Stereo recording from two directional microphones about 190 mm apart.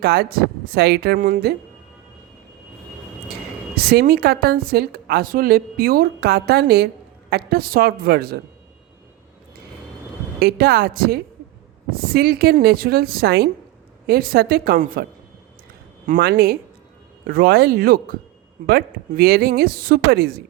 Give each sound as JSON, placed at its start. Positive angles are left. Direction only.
{"t": 0.0, "sound": "a woman's voice", "side_deg": -55}
{"t": 3.8, "sound": "a woman's voice", "side_deg": -55}
{"t": 10.4, "sound": "a woman's voice", "side_deg": -55}
{"t": 16.0, "sound": "a woman's voice", "side_deg": -45}